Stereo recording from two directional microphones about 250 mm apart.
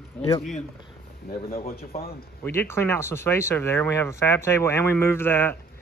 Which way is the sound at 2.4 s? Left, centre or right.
Centre.